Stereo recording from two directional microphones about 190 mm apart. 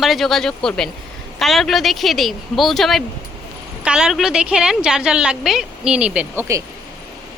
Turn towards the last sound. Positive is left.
turn(degrees=-10)  # may be behind; listen again after turning